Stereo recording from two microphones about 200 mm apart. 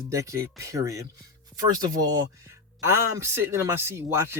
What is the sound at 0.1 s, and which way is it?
Speech, 15° right (ahead or behind).